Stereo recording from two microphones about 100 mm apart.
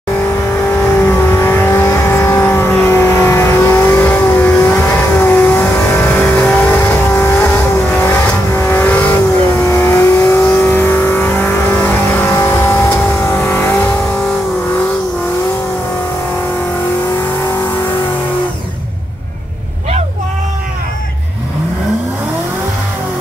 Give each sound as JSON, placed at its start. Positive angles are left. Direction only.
{"t": 0.7, "sound": "vehicle", "side_deg": 20}
{"t": 13.6, "sound": "vehicle", "side_deg": 20}